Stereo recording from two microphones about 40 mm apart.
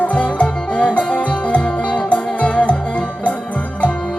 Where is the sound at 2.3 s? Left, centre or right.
Left.